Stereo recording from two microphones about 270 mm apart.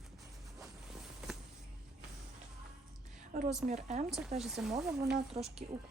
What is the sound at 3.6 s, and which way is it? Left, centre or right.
Speech, right.